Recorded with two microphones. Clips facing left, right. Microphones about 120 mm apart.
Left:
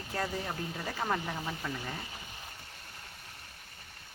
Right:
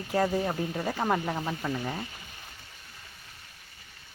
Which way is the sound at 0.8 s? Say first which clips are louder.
Right 5 dB; 30° right (ahead or behind).